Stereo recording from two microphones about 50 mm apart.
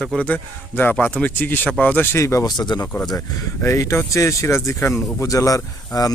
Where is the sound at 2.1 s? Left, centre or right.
Left.